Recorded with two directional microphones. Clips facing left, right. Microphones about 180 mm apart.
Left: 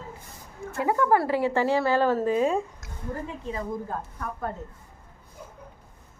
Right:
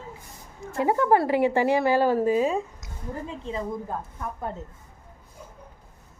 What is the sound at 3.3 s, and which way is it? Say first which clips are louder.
Speech: right 1 dB; 20° right (ahead or behind).